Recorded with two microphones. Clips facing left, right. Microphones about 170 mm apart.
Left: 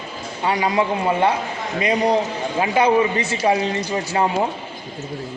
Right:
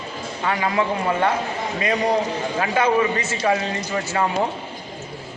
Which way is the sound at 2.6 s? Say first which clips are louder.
Left 3 dB; 20° left (ahead or behind).